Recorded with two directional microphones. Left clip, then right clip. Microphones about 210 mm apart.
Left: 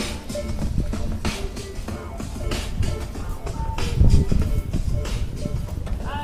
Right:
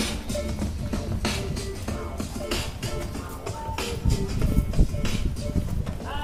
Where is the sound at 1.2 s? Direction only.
35° right (ahead or behind).